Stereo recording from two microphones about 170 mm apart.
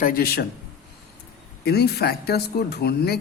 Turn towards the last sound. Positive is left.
turn(degrees=70)  # may be behind; listen again after turning